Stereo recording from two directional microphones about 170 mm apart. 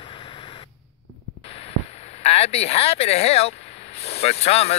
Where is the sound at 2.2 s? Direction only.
40° left (ahead or behind).